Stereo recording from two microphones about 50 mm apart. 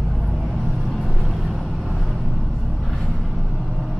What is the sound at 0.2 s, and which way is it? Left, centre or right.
Vehicle, centre.